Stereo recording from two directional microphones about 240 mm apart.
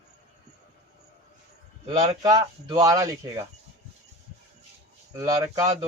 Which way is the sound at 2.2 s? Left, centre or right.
Centre.